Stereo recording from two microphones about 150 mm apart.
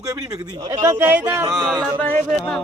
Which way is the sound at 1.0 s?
15° right (ahead or behind).